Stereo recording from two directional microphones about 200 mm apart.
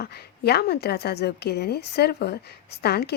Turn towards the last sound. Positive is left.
turn(degrees=55)  # may be behind; listen again after turning